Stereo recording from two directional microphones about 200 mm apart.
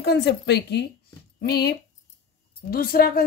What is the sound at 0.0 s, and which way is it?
A woman's voice, 55° left (ahead or behind).